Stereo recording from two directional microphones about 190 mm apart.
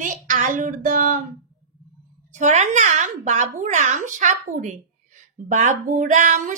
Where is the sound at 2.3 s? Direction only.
40° right (ahead or behind).